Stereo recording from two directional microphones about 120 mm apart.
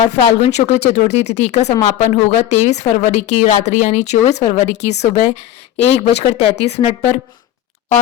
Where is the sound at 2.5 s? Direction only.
65° left (ahead or behind).